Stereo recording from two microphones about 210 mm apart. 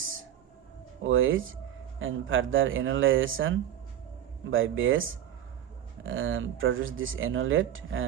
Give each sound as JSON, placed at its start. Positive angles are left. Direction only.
{"t": 1.0, "sound": "speech", "side_deg": -70}